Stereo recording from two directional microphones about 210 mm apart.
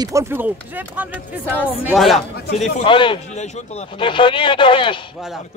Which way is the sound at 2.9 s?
25° left (ahead or behind).